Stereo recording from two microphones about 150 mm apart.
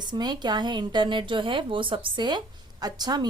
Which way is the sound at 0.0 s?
30° right (ahead or behind).